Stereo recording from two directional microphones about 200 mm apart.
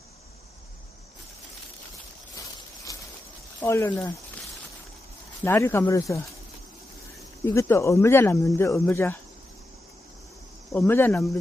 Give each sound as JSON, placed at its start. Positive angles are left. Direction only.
{"t": 2.6, "sound": "a sound", "side_deg": 15}
{"t": 3.6, "sound": "speech", "side_deg": 15}
{"t": 5.5, "sound": "speech", "side_deg": 10}
{"t": 7.4, "sound": "speech", "side_deg": 15}
{"t": 10.7, "sound": "speech", "side_deg": 10}